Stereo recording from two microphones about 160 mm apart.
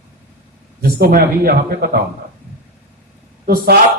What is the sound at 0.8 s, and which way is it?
A man's voice, 70° right (ahead or behind).